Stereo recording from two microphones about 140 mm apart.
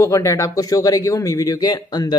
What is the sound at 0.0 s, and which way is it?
Speech, 20° left (ahead or behind).